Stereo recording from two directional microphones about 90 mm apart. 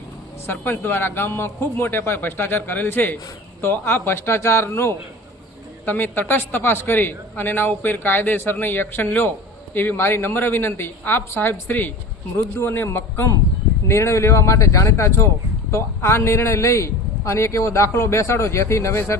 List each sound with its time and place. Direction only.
0.4 s a man's voice: 20° left (ahead or behind)